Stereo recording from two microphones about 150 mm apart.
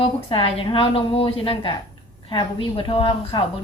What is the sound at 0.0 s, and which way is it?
A woman's voice, 40° left (ahead or behind).